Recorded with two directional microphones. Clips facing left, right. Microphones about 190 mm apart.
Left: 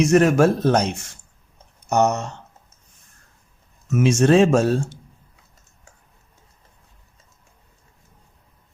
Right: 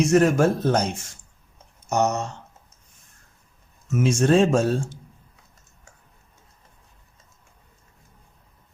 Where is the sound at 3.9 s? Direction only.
75° left (ahead or behind).